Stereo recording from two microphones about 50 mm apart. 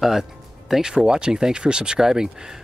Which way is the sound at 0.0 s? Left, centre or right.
Centre.